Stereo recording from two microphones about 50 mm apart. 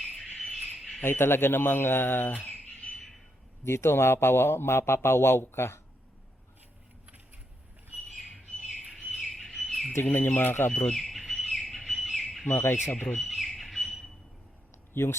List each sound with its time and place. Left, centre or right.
0.5 s bird: centre
1.0 s a man's voice: left
3.6 s a man's voice: left
9.1 s bird: centre
9.9 s a man's voice: left
10.9 s bird: centre
12.5 s a man's voice: left
12.9 s speech: left
13.1 s bird: centre
15.0 s speech: left